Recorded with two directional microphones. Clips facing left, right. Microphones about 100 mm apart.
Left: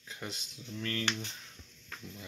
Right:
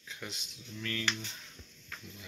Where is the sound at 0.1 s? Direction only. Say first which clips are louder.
Left 2 dB; 40° left (ahead or behind).